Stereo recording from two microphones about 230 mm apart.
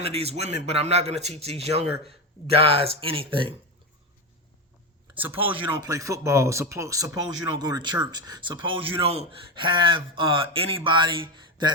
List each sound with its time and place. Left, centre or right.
0.0 s speech: right
5.5 s speech: centre